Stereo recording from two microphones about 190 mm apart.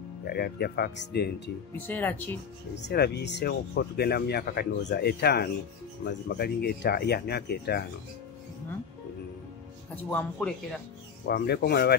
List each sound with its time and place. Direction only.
0.2 s speech: 55° left (ahead or behind)
1.9 s speech: 10° left (ahead or behind)
2.7 s speech: 60° left (ahead or behind)
10.0 s speech: 10° left (ahead or behind)
11.2 s speech: 55° left (ahead or behind)